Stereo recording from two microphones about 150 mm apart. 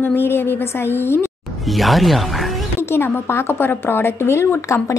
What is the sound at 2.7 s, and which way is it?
A woman's voice, 15° left (ahead or behind).